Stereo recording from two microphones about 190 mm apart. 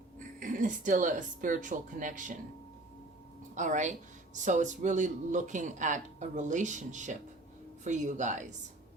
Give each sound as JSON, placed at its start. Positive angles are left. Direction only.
{"t": 0.3, "sound": "speech", "side_deg": -45}
{"t": 3.5, "sound": "speech", "side_deg": -40}